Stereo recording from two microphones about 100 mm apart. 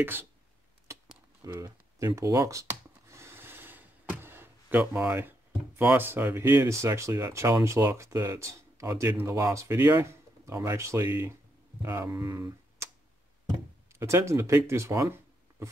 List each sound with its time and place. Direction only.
0.0 s speech: 20° right (ahead or behind)
1.4 s a sound: 30° right (ahead or behind)
5.8 s speech: 20° right (ahead or behind)
13.9 s speech: 30° right (ahead or behind)